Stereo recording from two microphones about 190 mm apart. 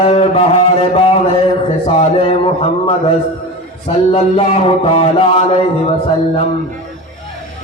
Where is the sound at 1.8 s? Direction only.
30° left (ahead or behind).